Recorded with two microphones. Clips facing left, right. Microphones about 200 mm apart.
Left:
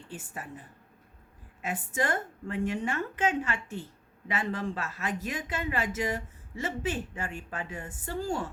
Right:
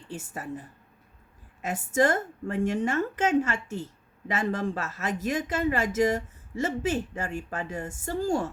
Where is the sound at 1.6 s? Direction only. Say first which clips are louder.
Right 7 dB; 45° right (ahead or behind).